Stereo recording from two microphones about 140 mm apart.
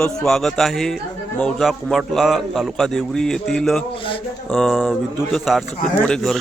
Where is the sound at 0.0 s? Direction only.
5° left (ahead or behind).